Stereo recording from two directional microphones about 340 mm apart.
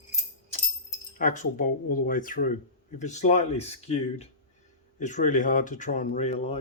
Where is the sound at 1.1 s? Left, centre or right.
Left.